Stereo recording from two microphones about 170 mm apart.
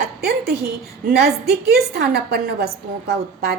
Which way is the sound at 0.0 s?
70° right (ahead or behind).